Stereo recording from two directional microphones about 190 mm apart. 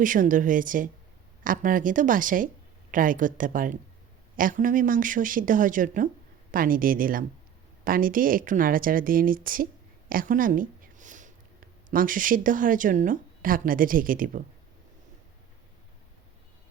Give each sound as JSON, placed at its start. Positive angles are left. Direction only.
{"t": 0.0, "sound": "speech", "side_deg": -45}
{"t": 10.1, "sound": "a sound", "side_deg": -45}
{"t": 11.9, "sound": "speech", "side_deg": -45}